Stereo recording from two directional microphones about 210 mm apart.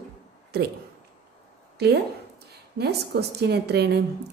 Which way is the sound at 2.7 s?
50° right (ahead or behind).